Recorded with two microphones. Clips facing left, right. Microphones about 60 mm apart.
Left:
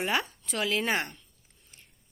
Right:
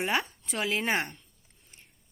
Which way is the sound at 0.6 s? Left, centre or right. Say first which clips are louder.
Left 1 dB; right.